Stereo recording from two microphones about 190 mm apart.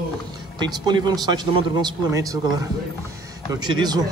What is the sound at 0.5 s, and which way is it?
A man's voice, 20° right (ahead or behind).